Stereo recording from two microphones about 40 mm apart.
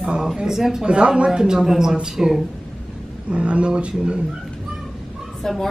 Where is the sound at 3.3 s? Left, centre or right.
Right.